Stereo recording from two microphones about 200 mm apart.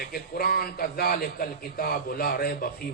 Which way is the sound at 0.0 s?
50° left (ahead or behind).